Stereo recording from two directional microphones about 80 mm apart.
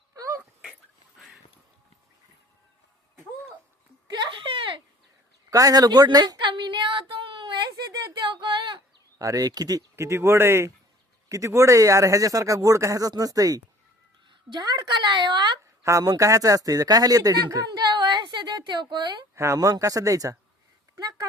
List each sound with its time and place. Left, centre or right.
0.2 s dog: right
4.1 s a sound: right
5.5 s a sound: right
8.1 s female singing: right
9.1 s speech: right
9.9 s speech: right
14.3 s a woman's voice: right
15.8 s speech: right
19.5 s speech: right
20.9 s a sound: right